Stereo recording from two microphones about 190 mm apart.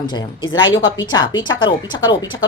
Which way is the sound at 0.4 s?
90° left.